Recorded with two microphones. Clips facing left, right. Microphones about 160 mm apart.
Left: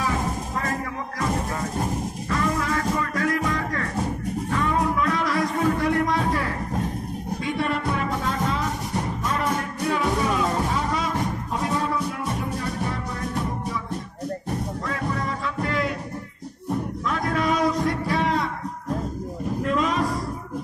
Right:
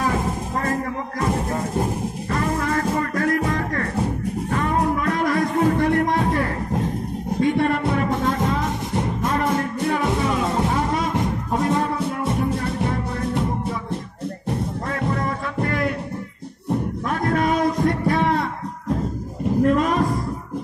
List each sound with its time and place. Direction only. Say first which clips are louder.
2.6 s music: right 3 dB; 50° right (ahead or behind)
12.3 s music: right 5 dB; 25° right (ahead or behind)
15.2 s music: right 3 dB; 55° right (ahead or behind)
17.1 s a sound: right 3 dB; 50° right (ahead or behind)
19.6 s music: right 6 dB; 50° right (ahead or behind)